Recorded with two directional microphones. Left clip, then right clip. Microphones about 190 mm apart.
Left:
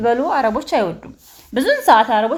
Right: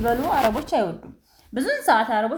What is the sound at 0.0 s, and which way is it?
A woman's voice, 30° left (ahead or behind).